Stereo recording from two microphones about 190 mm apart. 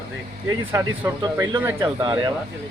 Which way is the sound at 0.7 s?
15° right (ahead or behind).